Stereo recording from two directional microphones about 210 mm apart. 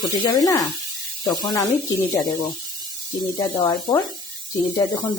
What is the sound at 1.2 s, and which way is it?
Speech, 20° left (ahead or behind).